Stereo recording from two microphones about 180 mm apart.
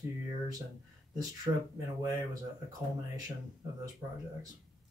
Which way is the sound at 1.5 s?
30° right (ahead or behind).